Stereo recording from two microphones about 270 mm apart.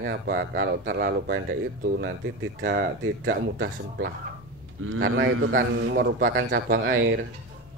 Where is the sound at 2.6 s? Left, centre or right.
Right.